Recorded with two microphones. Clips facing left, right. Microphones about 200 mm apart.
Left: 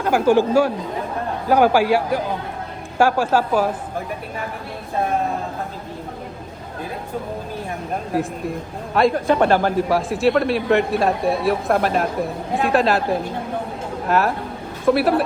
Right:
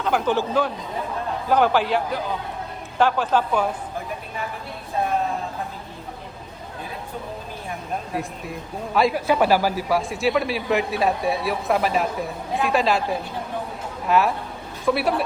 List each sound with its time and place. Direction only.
0.0 s a man's voice: 10° left (ahead or behind)
9.0 s a man's voice: 5° right (ahead or behind)